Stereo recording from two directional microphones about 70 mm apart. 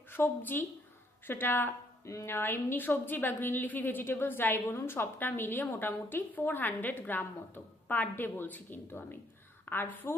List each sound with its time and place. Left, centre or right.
0.1 s a woman's voice: left